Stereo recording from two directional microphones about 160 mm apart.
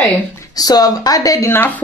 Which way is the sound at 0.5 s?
25° left (ahead or behind).